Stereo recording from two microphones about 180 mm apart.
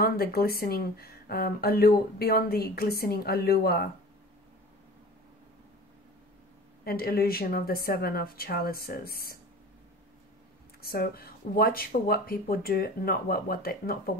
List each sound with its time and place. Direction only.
0.0 s a woman's voice: 55° left (ahead or behind)
6.8 s a woman's voice: 55° left (ahead or behind)
10.8 s a woman's voice: 55° left (ahead or behind)